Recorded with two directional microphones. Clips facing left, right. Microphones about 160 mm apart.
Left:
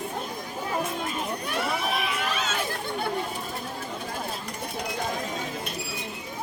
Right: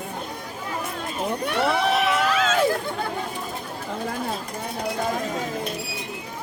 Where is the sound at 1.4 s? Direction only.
75° right (ahead or behind); by 2.5 s 90° right.